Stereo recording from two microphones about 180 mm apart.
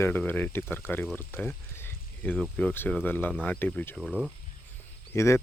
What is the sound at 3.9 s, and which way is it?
Speech, 5° right (ahead or behind).